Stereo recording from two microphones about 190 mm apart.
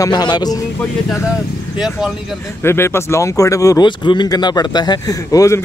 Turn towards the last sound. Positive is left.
turn(degrees=15)  # may be behind; listen again after turning